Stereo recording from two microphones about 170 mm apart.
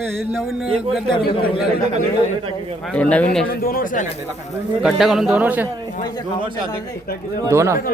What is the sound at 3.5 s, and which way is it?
Speech, 60° left (ahead or behind).